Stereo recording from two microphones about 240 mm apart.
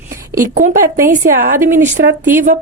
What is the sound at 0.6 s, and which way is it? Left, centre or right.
A woman's voice, right.